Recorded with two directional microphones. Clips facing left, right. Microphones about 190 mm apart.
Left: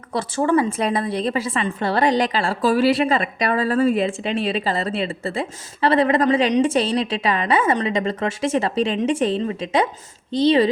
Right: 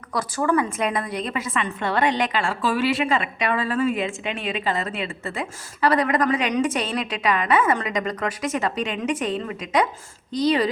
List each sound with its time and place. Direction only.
0.1 s a woman's voice: 25° left (ahead or behind)